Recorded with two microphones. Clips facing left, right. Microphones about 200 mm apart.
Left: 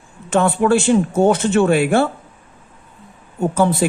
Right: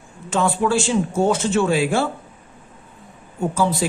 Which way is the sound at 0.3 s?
60° left (ahead or behind).